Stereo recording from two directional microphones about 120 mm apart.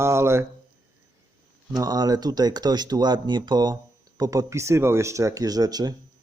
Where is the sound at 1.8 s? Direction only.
30° right (ahead or behind).